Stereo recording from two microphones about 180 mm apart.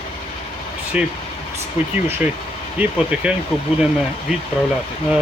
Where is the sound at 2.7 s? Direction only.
5° right (ahead or behind).